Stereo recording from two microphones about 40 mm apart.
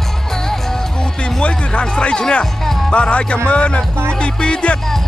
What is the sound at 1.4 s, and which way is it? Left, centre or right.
Music, left.